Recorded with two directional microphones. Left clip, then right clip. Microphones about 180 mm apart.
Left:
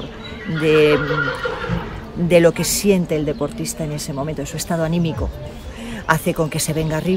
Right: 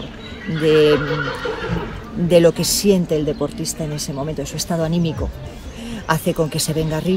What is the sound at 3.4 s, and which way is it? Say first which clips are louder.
Speech: even; 10° right (ahead or behind).